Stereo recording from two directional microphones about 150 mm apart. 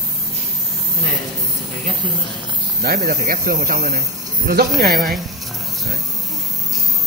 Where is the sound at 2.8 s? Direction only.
80° right.